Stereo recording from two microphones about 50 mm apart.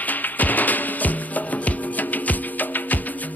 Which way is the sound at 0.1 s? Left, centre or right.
Left.